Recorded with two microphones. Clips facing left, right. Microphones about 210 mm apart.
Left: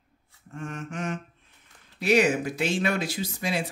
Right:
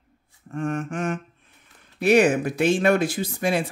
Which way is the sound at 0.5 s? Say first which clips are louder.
Right 9 dB; 55° right (ahead or behind).